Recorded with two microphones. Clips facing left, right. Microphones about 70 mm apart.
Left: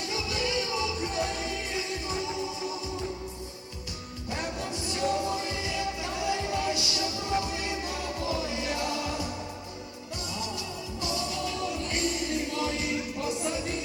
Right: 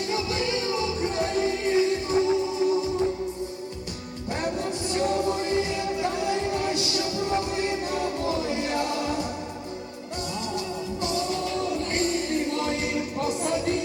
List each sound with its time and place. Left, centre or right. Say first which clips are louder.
0.1 s music: right 3 dB; right
4.9 s music: right 3 dB; right
11.0 s music: right 4 dB; right